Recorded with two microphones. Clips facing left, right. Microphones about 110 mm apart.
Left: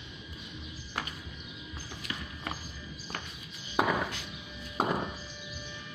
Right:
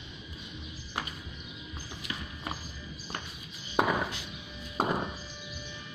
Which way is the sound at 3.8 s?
15° right (ahead or behind).